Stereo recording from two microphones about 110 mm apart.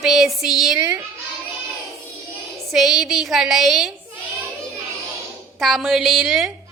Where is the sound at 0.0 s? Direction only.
Centre (ahead or behind).